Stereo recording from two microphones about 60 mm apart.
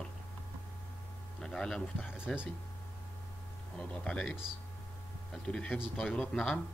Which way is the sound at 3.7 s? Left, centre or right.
Centre.